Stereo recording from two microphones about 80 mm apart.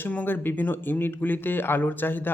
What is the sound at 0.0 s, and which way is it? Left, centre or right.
Speech, left.